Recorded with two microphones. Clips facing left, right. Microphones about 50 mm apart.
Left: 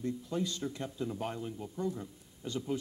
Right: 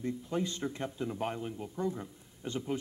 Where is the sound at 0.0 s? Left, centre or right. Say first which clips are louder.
Right 1 dB; right.